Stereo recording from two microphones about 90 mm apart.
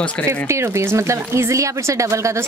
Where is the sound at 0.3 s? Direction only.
30° right (ahead or behind).